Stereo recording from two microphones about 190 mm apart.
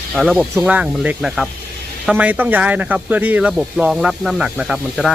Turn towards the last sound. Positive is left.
turn(degrees=-5)  # may be behind; listen again after turning